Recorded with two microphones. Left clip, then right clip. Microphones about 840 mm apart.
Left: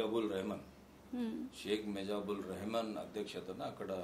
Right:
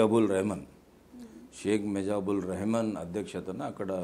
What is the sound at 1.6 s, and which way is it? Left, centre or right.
A man's voice, right.